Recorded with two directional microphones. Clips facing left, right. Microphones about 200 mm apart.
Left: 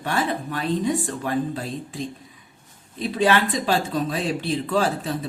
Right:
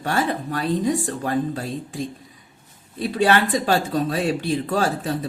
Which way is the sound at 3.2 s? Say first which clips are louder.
Right 1 dB; 40° right (ahead or behind).